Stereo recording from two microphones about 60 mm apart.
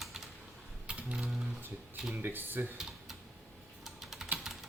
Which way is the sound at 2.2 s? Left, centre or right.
Right.